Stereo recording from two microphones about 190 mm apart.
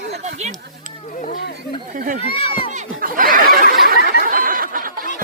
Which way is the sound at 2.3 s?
30° left (ahead or behind).